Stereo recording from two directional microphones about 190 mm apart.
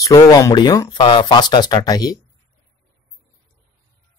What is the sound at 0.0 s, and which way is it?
Speech, 15° left (ahead or behind).